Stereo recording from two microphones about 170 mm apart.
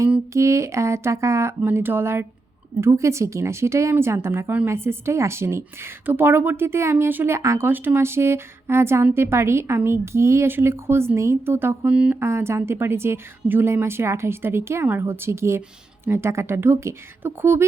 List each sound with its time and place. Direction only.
0.0 s speech: 15° right (ahead or behind)